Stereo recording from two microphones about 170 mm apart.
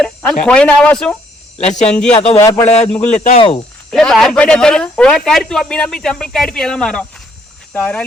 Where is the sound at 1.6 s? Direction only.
40° left (ahead or behind).